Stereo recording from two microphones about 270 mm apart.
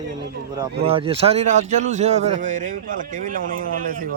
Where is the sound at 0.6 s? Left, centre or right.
Right.